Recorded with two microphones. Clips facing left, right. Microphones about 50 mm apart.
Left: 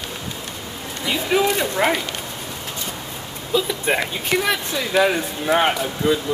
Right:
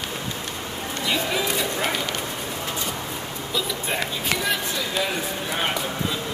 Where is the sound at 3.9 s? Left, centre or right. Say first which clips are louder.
Left 8 dB; left.